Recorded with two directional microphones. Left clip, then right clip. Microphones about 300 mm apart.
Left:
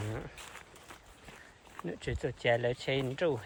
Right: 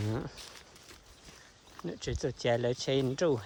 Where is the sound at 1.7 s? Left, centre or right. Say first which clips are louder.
Right 1 dB; centre.